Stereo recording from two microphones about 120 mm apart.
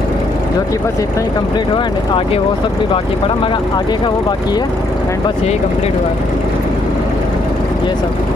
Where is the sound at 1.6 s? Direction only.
45° left (ahead or behind).